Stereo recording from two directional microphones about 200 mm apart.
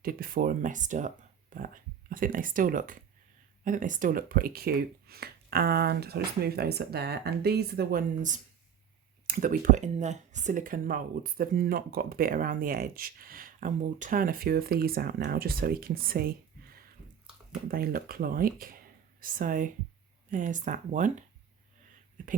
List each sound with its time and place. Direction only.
0.0 s speech: 45° right (ahead or behind)
17.7 s speech: 50° right (ahead or behind)